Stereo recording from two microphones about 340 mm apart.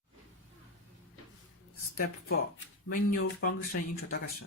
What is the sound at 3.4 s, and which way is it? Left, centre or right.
Speech, left.